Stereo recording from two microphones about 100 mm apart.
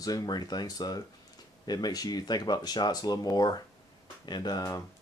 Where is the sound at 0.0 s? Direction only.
40° left (ahead or behind).